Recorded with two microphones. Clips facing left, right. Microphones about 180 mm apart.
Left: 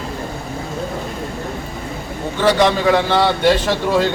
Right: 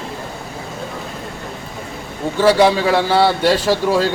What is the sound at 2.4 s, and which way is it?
A man's voice, 5° right (ahead or behind).